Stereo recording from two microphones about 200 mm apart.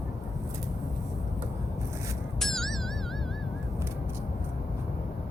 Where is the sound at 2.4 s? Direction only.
Centre (ahead or behind).